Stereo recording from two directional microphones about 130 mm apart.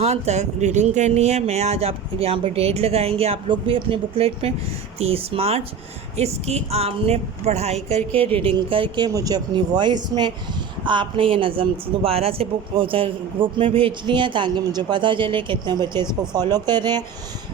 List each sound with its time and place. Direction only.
0.0 s speech: 60° right (ahead or behind); by 17.0 s 30° right (ahead or behind)